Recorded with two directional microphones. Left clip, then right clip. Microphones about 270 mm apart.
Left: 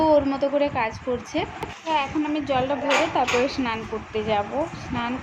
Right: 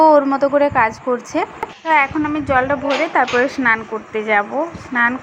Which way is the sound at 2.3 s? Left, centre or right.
Right.